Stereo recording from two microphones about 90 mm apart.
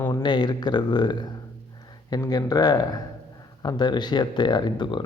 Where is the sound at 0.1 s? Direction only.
55° left (ahead or behind).